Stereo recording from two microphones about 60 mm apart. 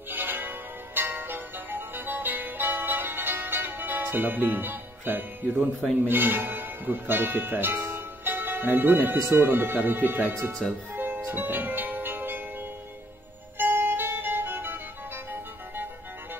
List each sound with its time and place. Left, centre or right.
0.1 s music: right
6.0 s speech: right
10.6 s speech: centre
11.0 s music: right
13.6 s music: right